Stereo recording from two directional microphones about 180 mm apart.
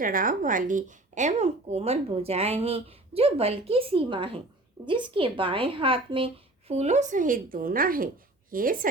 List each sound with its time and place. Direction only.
0.0 s speech: 50° right (ahead or behind)